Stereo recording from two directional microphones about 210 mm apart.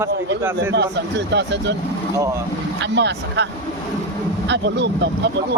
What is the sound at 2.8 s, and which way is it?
Speech, 55° right (ahead or behind).